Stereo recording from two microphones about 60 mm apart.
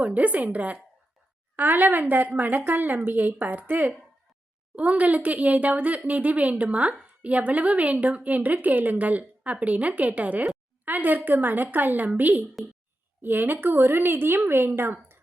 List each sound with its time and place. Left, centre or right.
0.0 s speech: right
1.5 s a woman's voice: right